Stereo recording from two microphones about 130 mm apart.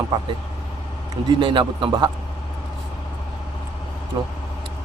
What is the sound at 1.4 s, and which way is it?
Speech, 35° right (ahead or behind).